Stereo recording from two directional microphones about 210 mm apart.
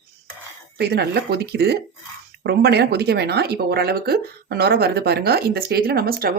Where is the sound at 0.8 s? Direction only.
50° right (ahead or behind).